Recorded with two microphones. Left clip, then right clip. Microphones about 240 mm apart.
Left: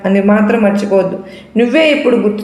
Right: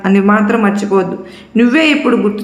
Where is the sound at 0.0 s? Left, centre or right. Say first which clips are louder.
Even; right.